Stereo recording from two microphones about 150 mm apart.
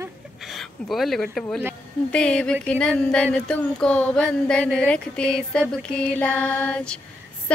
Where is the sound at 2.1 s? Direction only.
5° left (ahead or behind).